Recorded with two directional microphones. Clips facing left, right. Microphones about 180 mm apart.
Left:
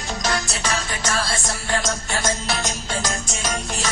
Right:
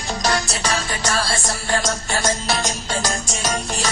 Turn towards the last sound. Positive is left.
turn(degrees=-35)  # may be behind; listen again after turning